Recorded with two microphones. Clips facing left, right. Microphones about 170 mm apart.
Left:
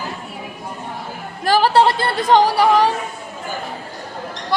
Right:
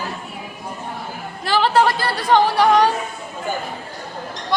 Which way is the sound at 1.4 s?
40° left (ahead or behind).